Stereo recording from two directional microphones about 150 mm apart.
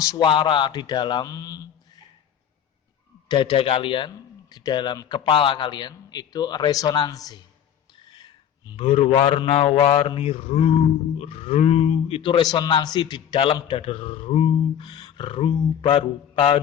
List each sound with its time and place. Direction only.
0.0 s speech: 25° left (ahead or behind)
3.2 s a man's voice: 30° left (ahead or behind)